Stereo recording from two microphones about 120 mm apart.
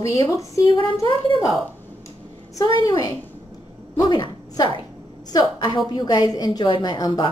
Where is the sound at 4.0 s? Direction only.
40° left (ahead or behind).